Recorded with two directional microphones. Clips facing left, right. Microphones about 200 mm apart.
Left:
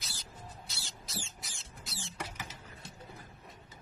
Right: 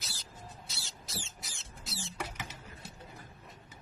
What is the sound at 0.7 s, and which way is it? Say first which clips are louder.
Rodents: even; centre (ahead or behind).